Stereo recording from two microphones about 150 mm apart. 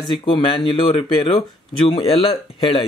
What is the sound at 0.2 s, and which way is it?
Speech, 35° left (ahead or behind).